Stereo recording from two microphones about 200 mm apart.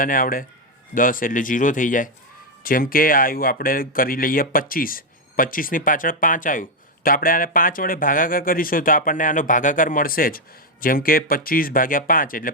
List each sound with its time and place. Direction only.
0.0 s speech: 45° left (ahead or behind)